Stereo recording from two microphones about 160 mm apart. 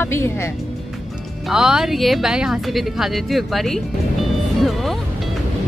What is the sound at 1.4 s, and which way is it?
Speech, 5° right (ahead or behind).